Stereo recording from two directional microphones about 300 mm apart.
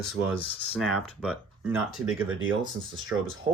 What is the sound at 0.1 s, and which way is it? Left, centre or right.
Speech, centre.